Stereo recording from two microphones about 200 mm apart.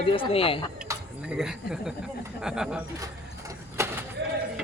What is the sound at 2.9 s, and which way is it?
Vehicle, 15° right (ahead or behind).